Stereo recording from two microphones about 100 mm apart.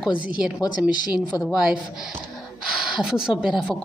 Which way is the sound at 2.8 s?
5° right (ahead or behind).